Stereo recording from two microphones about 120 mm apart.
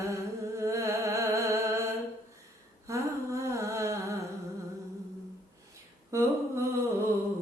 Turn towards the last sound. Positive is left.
turn(degrees=-25)  # may be behind; listen again after turning